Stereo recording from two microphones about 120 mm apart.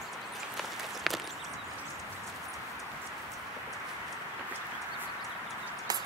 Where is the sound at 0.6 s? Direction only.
Centre (ahead or behind).